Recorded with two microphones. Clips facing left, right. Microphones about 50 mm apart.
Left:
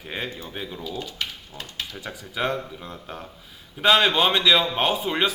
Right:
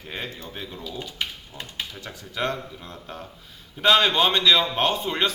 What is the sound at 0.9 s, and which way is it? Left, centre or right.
Speech, centre.